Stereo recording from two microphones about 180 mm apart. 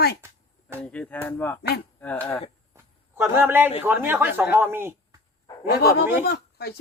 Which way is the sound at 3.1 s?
15° right (ahead or behind).